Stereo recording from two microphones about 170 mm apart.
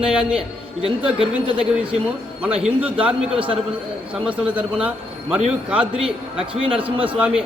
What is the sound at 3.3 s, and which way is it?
Speech, 30° right (ahead or behind).